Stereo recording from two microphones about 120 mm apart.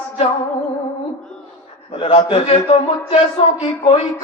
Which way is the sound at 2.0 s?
55° left (ahead or behind).